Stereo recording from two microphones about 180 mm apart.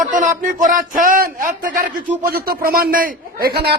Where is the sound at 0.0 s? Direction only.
45° right (ahead or behind).